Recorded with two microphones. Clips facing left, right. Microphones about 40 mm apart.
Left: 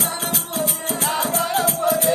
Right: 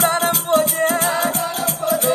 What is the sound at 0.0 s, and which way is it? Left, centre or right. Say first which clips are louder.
Music: right 8 dB; right.